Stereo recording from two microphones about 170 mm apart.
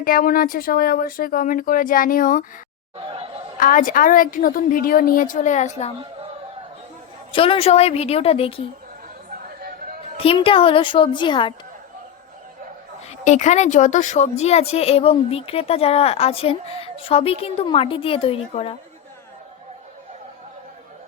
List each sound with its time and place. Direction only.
0.0 s speech: 55° left (ahead or behind)
3.1 s chatter: 35° right (ahead or behind)
3.6 s a woman's voice: 50° left (ahead or behind)
7.3 s a woman's voice: 30° left (ahead or behind)
9.6 s a sound: 55° right (ahead or behind)
10.2 s a child's voice: 35° left (ahead or behind)
13.2 s a woman's voice: 45° left (ahead or behind)